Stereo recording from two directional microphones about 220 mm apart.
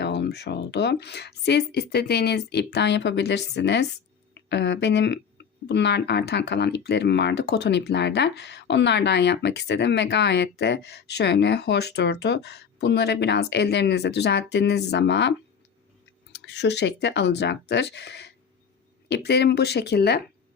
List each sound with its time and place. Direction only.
0.0 s speech: 50° left (ahead or behind)